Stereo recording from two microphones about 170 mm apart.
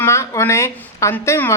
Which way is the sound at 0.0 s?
15° left (ahead or behind).